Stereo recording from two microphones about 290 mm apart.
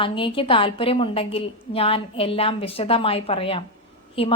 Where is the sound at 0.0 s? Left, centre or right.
Centre.